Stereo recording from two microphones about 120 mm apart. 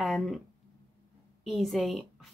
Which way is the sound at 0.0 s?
Centre (ahead or behind).